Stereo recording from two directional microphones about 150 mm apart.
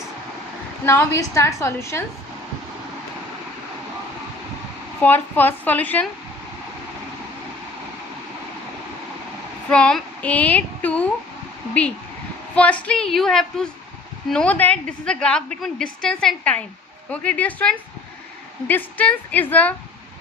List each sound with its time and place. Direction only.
0.9 s a woman's voice: 20° left (ahead or behind)
4.9 s a woman's voice: 10° left (ahead or behind)
9.6 s a sound: 5° left (ahead or behind)
12.5 s a woman's voice: 10° left (ahead or behind)